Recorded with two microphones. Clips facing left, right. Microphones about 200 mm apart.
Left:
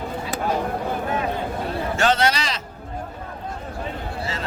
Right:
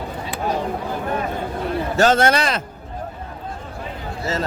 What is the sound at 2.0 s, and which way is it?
Speech, 45° right (ahead or behind).